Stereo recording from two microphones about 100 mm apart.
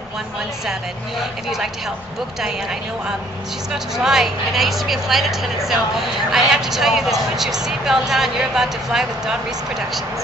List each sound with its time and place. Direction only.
4.0 s speech: 5° right (ahead or behind)